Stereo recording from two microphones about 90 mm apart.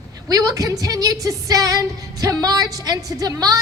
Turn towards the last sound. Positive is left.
turn(degrees=-40)  # may be behind; listen again after turning